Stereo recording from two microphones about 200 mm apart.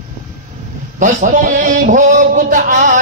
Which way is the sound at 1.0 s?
40° right (ahead or behind).